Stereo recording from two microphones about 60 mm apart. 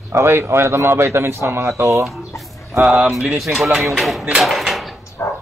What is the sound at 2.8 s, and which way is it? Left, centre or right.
A man's voice, centre.